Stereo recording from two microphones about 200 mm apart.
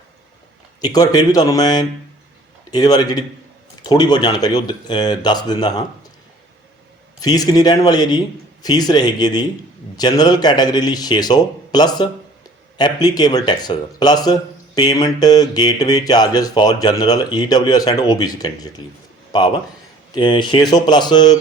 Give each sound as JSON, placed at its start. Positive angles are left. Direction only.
{"t": 0.8, "sound": "speech", "side_deg": 20}
{"t": 7.2, "sound": "speech", "side_deg": 20}